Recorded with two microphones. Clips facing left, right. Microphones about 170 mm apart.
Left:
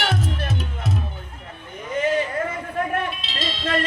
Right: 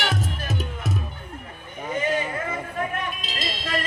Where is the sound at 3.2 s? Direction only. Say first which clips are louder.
Left 2 dB; 45° right (ahead or behind).